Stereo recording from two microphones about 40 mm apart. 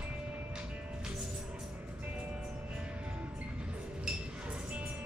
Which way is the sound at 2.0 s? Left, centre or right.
Right.